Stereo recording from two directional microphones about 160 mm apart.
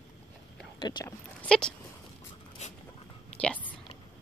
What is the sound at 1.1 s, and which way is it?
Speech, 5° left (ahead or behind).